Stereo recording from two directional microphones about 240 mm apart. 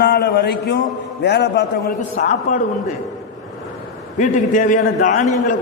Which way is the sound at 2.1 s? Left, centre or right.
Left.